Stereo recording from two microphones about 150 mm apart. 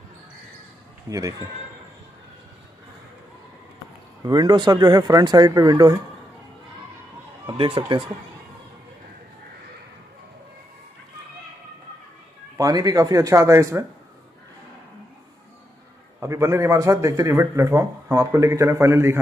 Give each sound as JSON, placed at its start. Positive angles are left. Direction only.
{"t": 1.1, "sound": "a man's voice", "side_deg": -25}
{"t": 4.2, "sound": "a man's voice", "side_deg": -25}
{"t": 7.5, "sound": "speech", "side_deg": -35}
{"t": 12.5, "sound": "a man's voice", "side_deg": -25}
{"t": 16.2, "sound": "a man's voice", "side_deg": -20}